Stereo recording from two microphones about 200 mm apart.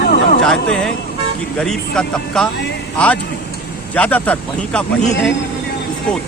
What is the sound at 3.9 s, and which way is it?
Speech, 5° left (ahead or behind).